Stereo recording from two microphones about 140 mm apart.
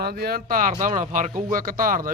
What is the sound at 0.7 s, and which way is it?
Speech, 65° right (ahead or behind).